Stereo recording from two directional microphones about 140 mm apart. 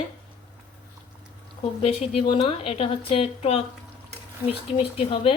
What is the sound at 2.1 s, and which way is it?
A woman's voice, 40° left (ahead or behind).